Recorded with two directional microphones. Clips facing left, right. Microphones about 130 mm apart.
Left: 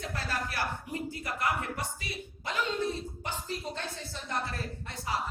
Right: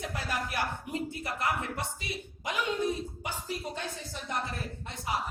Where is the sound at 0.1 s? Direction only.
15° right (ahead or behind).